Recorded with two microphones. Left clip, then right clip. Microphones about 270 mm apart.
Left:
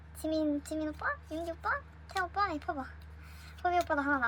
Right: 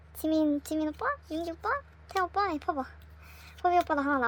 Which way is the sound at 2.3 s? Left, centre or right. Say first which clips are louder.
Right 4 dB; right.